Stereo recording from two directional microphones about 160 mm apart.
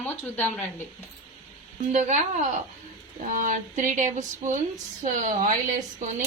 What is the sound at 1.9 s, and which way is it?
Speech, 45° right (ahead or behind).